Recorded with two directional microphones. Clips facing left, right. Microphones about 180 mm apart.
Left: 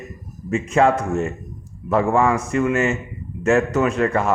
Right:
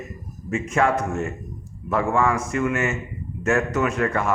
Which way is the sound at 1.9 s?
30° left (ahead or behind).